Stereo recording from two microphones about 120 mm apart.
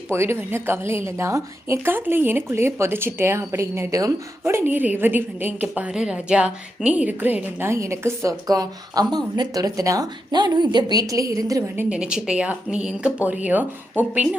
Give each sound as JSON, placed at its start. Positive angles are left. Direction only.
{"t": 0.1, "sound": "a woman's voice", "side_deg": -20}
{"t": 11.8, "sound": "speech", "side_deg": -10}